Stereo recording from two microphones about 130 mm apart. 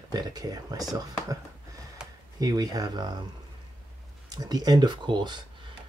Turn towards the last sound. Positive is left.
turn(degrees=-35)  # may be behind; listen again after turning